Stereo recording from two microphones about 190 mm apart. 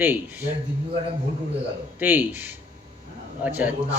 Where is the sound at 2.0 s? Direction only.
10° right (ahead or behind).